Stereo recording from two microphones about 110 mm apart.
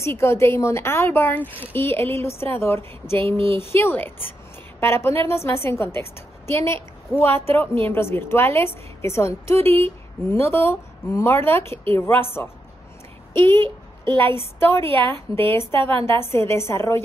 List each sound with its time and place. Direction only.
0.0 s a woman's voice: 25° left (ahead or behind)
3.3 s speech: 60° right (ahead or behind)
3.5 s a woman's voice: 20° left (ahead or behind)
13.3 s a woman's voice: 25° left (ahead or behind)
14.8 s a woman's voice: 55° right (ahead or behind)
15.7 s a woman's voice: 20° left (ahead or behind)